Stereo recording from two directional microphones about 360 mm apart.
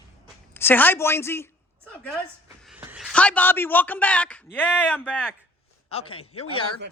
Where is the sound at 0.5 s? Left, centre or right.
Centre.